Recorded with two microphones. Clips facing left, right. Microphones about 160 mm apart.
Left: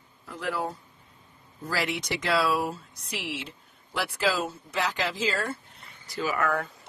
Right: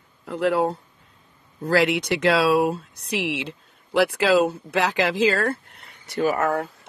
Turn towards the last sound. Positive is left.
turn(degrees=-35)  # may be behind; listen again after turning